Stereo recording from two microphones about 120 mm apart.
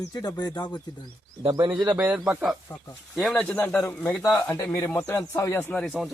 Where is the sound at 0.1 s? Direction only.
35° left (ahead or behind).